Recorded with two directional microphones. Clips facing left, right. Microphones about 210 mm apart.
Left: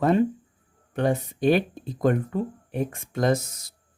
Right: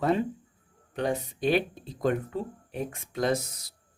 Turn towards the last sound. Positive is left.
turn(degrees=45)  # may be behind; listen again after turning